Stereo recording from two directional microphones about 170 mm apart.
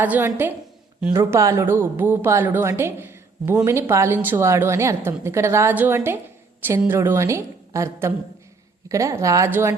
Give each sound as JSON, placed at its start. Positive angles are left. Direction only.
{"t": 0.0, "sound": "speech", "side_deg": -10}